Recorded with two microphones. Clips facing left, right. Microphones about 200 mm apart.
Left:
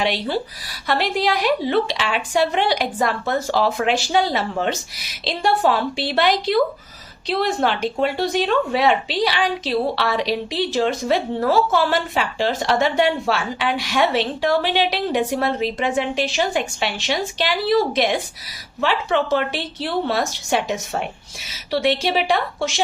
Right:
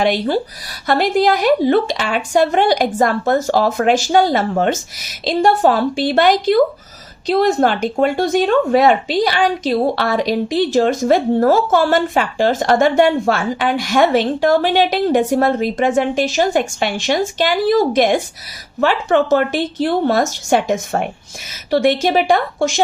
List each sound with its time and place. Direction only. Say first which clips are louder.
0.0 s speech: right 6 dB; 45° right (ahead or behind)